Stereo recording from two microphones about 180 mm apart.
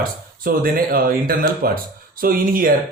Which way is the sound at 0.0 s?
55° right (ahead or behind).